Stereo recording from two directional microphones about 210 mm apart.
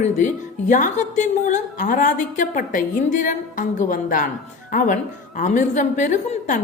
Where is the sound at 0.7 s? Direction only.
35° left (ahead or behind).